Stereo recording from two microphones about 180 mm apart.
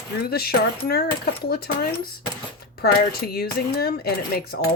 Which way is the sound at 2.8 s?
55° left (ahead or behind).